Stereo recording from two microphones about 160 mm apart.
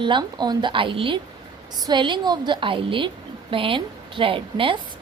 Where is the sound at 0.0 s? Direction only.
30° right (ahead or behind).